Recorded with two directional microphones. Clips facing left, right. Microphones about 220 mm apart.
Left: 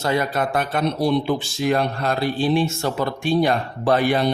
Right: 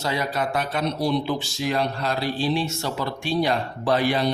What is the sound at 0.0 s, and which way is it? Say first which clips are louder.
Speech: left 4 dB; 50° left (ahead or behind).